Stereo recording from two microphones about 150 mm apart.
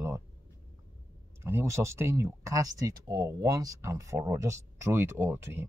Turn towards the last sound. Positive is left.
turn(degrees=-15)  # may be behind; listen again after turning